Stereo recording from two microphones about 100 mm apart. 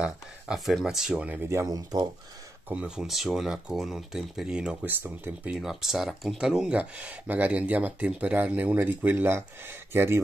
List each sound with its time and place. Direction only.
0.0 s speech: 5° right (ahead or behind)
1.4 s speech: 25° right (ahead or behind)
1.7 s speech: 40° right (ahead or behind)
2.7 s speech: 10° right (ahead or behind)
5.0 s speech: 20° right (ahead or behind)
5.5 s speech: 5° right (ahead or behind); by 10.2 s 25° right (ahead or behind)